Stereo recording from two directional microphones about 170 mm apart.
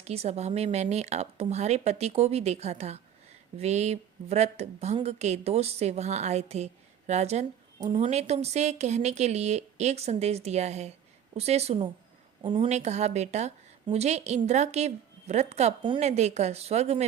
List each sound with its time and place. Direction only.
0.0 s a woman's voice: 40° right (ahead or behind)
7.8 s a woman's voice: 30° right (ahead or behind)
12.6 s a woman's voice: 40° right (ahead or behind)